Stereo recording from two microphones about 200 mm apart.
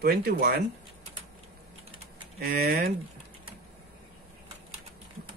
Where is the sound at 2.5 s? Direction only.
45° right (ahead or behind).